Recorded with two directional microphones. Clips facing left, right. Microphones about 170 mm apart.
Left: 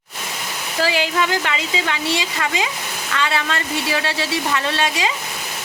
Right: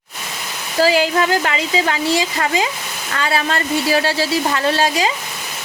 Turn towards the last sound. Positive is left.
turn(degrees=-35)  # may be behind; listen again after turning